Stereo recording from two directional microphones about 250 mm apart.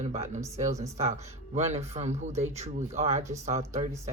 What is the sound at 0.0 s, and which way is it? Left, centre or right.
Speech, right.